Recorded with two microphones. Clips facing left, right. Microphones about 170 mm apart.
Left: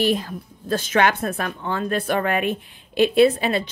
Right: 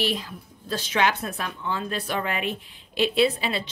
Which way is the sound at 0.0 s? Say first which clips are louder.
Left 7 dB; 45° left (ahead or behind).